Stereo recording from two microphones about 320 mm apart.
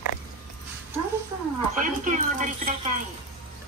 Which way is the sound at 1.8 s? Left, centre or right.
Right.